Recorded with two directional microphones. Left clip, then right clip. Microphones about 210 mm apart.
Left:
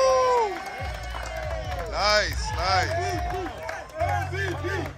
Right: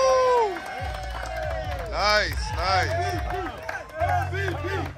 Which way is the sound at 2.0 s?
5° left (ahead or behind).